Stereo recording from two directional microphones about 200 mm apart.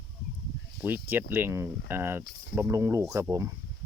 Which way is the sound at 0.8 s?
10° right (ahead or behind).